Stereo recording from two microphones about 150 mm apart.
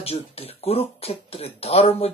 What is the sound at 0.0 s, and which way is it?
Speech, 40° left (ahead or behind).